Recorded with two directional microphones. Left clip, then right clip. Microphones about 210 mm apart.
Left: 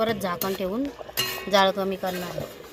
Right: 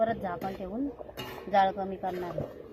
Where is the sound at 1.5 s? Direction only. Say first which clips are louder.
Left 4 dB; 55° left (ahead or behind).